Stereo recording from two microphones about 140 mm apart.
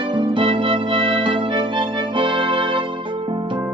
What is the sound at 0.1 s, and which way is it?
Music, 35° right (ahead or behind).